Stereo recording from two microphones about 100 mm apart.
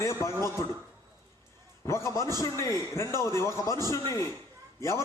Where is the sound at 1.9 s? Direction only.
30° left (ahead or behind).